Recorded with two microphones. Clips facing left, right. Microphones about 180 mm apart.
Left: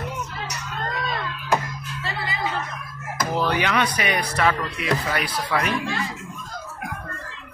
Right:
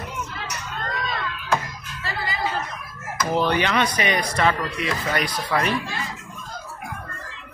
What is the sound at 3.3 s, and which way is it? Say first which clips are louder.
Speech: right 1 dB; 5° left (ahead or behind).